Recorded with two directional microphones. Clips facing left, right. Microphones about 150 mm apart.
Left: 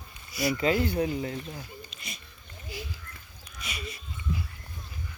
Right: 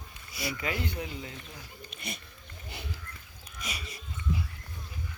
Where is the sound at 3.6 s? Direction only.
40° right (ahead or behind).